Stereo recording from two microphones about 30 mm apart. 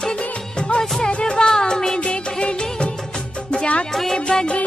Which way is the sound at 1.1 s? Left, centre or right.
Left.